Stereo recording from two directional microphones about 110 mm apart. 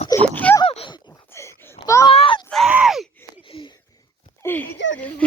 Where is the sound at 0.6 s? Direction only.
55° left (ahead or behind).